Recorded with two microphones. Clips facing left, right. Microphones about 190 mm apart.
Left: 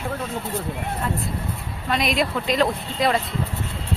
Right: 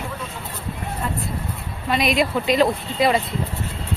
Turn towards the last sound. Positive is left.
turn(degrees=-5)  # may be behind; listen again after turning